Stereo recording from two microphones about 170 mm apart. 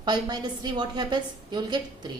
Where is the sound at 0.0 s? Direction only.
25° right (ahead or behind).